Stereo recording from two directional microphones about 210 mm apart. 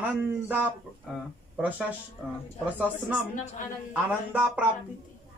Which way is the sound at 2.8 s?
5° right (ahead or behind).